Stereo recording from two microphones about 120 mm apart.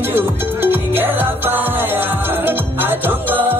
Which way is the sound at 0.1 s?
15° right (ahead or behind).